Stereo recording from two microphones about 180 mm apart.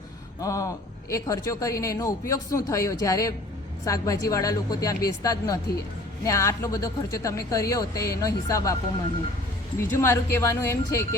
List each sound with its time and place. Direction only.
0.4 s a man's voice: 20° left (ahead or behind)